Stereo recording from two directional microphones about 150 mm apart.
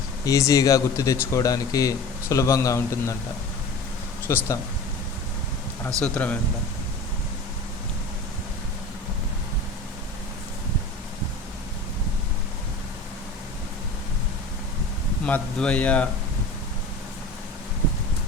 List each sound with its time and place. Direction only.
0.3 s speech: 20° left (ahead or behind)
4.3 s speech: 15° left (ahead or behind)
6.0 s speech: 10° left (ahead or behind)
15.3 s speech: 10° left (ahead or behind)